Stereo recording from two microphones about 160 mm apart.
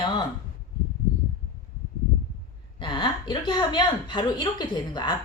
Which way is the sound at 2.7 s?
30° left (ahead or behind).